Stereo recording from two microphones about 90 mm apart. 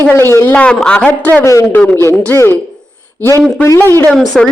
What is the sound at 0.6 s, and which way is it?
Speech, 10° left (ahead or behind).